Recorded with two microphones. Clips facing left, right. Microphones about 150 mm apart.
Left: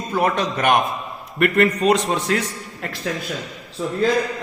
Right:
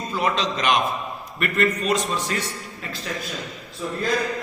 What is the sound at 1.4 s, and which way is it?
A man's voice, 65° left (ahead or behind).